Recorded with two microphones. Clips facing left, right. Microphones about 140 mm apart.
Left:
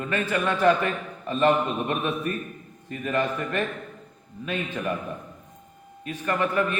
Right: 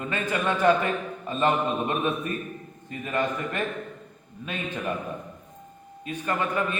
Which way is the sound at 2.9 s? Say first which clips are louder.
Left 2 dB; 20° right (ahead or behind).